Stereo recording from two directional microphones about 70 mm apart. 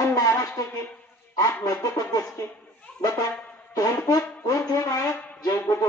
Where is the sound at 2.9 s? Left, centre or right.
Centre.